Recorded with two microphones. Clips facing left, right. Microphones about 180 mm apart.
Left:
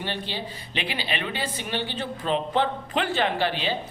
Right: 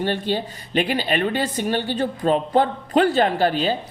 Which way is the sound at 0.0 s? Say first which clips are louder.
Right 9 dB; 45° right (ahead or behind).